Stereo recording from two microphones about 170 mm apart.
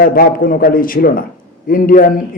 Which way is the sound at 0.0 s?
60° left (ahead or behind).